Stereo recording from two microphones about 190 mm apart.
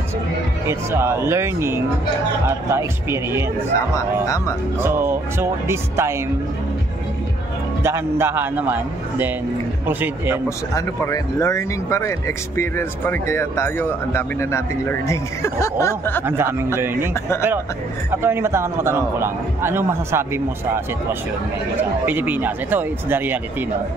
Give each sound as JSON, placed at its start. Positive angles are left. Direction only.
{"t": 0.7, "sound": "a man's voice", "side_deg": -15}
{"t": 3.7, "sound": "speech", "side_deg": 15}
{"t": 4.8, "sound": "a man's voice", "side_deg": -10}
{"t": 7.8, "sound": "a man's voice", "side_deg": -15}
{"t": 10.7, "sound": "speech", "side_deg": 15}
{"t": 16.3, "sound": "a man's voice", "side_deg": -15}
{"t": 17.1, "sound": "speech", "side_deg": 15}
{"t": 18.1, "sound": "a man's voice", "side_deg": -10}